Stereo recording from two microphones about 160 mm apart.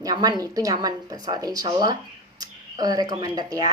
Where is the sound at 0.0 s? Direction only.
25° right (ahead or behind).